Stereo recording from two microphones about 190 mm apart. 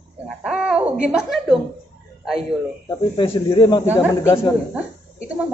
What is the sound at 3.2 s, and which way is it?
Speech, 25° left (ahead or behind).